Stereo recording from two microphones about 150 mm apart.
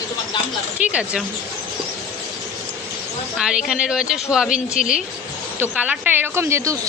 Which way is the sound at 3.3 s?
5° right (ahead or behind).